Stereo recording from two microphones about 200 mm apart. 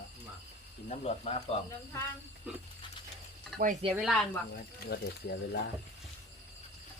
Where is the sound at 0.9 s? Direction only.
30° left (ahead or behind).